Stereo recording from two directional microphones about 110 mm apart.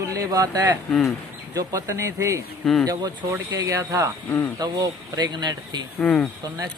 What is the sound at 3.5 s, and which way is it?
Speech, 30° right (ahead or behind).